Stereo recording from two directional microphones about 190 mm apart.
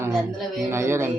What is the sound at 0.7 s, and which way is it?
Speech, 15° right (ahead or behind).